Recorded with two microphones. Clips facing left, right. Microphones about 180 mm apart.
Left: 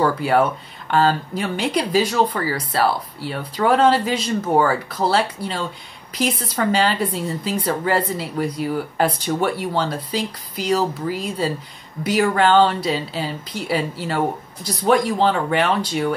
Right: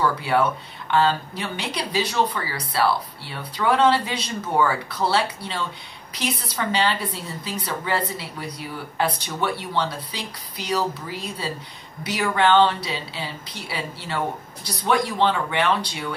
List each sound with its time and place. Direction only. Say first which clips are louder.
0.0 s speech: left 4 dB; 40° left (ahead or behind)